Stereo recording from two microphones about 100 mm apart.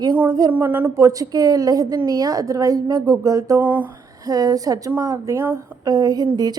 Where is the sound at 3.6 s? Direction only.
20° right (ahead or behind).